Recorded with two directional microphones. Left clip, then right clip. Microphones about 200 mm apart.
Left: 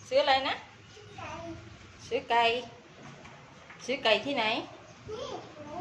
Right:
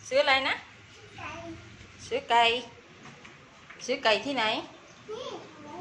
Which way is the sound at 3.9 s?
Centre (ahead or behind).